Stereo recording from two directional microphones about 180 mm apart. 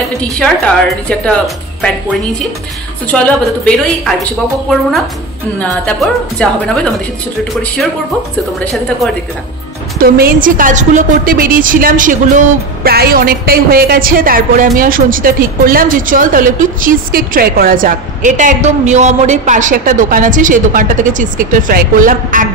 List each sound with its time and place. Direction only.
0.4 s a woman's voice: 5° left (ahead or behind)
3.1 s a woman's voice: 5° left (ahead or behind)
5.6 s a woman's voice: 5° left (ahead or behind)
9.9 s a woman's voice: 55° right (ahead or behind)
12.8 s a woman's voice: 60° right (ahead or behind)